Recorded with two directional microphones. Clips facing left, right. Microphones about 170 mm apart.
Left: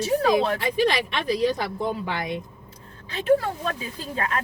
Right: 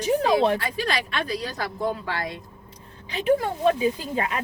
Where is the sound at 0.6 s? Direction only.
20° left (ahead or behind).